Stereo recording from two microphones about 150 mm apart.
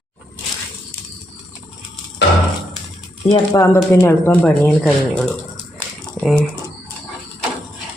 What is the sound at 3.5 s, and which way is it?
Speech, 20° left (ahead or behind).